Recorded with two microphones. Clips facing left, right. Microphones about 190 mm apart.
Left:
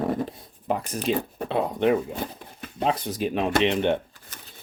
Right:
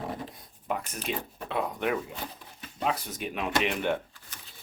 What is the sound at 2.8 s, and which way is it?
Speech, 30° left (ahead or behind).